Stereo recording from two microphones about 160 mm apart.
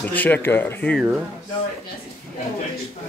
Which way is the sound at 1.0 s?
5° right (ahead or behind).